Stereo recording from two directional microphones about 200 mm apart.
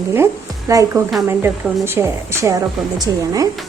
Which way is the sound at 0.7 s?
15° right (ahead or behind).